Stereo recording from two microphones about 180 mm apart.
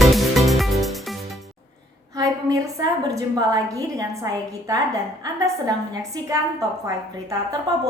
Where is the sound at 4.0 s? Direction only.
20° right (ahead or behind).